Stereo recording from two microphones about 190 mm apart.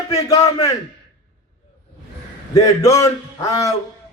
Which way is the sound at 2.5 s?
20° left (ahead or behind).